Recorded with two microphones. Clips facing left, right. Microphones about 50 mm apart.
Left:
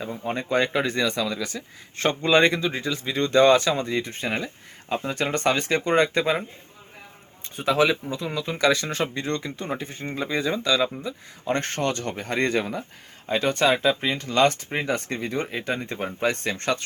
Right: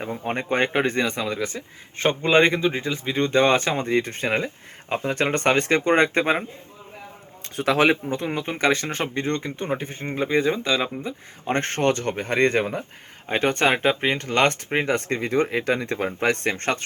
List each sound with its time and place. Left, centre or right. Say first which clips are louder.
0.0 s speech: right 2 dB; right
3.9 s speech: right 4 dB; right
7.4 s a man's voice: right 2 dB; right
8.1 s speech: right 2 dB; right
11.0 s speech: right 1 dB; right